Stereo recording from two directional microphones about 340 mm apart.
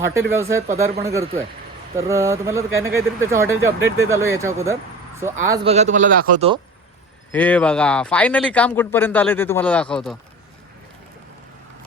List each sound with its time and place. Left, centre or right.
0.3 s speech: centre
7.3 s speech: centre